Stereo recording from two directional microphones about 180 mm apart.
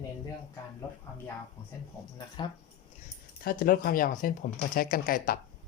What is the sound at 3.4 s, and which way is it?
Speech, 50° left (ahead or behind).